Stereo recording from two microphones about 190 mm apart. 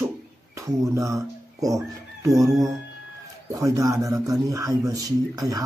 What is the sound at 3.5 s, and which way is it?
Speech, 15° right (ahead or behind).